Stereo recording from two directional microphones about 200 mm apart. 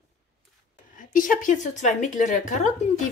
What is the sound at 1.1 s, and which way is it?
Speech, 45° left (ahead or behind).